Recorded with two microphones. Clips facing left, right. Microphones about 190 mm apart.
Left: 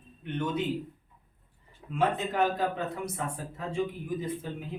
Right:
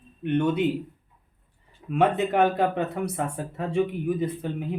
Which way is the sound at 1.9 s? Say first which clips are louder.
Right 6 dB; 65° right (ahead or behind).